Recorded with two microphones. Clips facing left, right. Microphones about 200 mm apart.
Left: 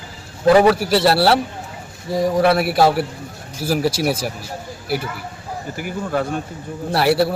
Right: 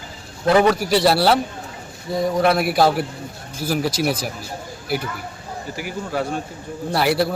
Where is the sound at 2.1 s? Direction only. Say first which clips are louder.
Left 2 dB; 35° left (ahead or behind).